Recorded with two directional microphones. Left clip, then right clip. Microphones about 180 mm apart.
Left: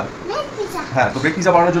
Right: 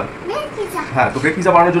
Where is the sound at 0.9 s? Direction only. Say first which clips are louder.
Right 1 dB; 15° left (ahead or behind).